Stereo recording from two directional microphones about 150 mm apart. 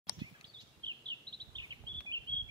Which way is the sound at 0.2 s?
30° right (ahead or behind).